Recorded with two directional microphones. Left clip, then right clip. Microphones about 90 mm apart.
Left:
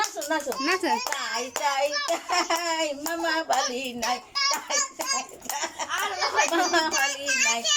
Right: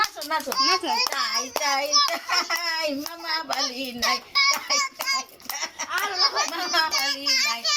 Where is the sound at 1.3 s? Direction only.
25° left (ahead or behind).